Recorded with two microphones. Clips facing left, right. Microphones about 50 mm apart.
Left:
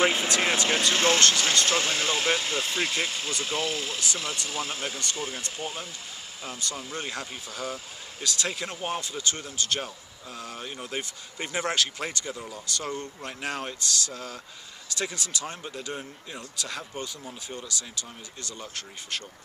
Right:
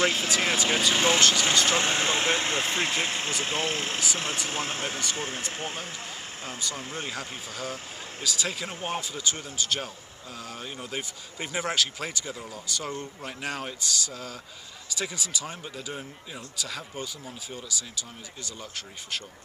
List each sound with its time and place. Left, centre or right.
0.0 s speech: centre
0.3 s speech: centre
1.8 s speech: right
6.6 s speech: centre